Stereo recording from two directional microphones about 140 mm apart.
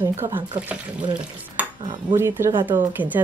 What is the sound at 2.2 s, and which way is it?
Speech, 15° right (ahead or behind).